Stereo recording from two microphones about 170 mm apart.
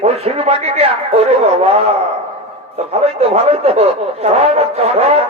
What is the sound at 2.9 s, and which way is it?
A man's voice, 40° right (ahead or behind).